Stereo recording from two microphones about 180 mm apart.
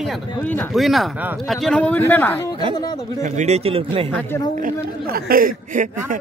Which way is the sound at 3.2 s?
40° right (ahead or behind).